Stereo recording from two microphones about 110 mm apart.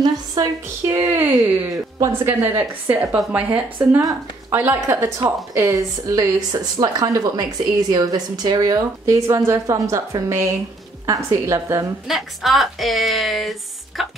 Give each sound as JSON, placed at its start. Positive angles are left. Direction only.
{"t": 0.0, "sound": "a sound", "side_deg": -40}
{"t": 0.9, "sound": "speech", "side_deg": -20}
{"t": 12.1, "sound": "speech", "side_deg": 0}